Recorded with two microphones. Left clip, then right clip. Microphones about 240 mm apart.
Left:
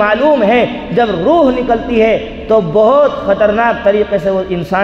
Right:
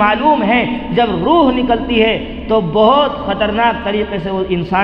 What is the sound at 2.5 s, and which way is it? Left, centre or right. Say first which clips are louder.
A man's voice: left 2 dB; left.